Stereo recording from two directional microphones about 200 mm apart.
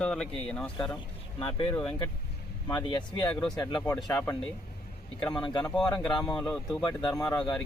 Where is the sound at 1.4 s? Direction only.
25° left (ahead or behind).